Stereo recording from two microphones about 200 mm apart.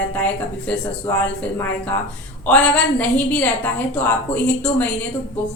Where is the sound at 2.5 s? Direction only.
5° left (ahead or behind).